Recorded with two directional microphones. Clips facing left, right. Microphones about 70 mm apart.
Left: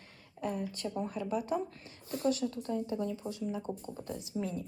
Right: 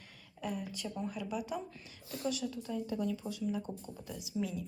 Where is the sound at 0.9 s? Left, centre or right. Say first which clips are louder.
Left 4 dB; left.